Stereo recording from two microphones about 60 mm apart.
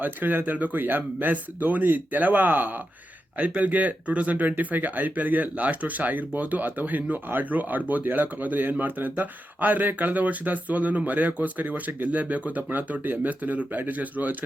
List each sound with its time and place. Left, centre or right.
0.0 s speech: right